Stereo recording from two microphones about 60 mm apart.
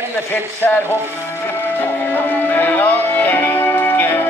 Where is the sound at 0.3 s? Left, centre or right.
Left.